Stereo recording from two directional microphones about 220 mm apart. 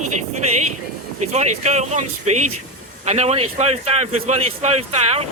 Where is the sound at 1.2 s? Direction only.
30° right (ahead or behind).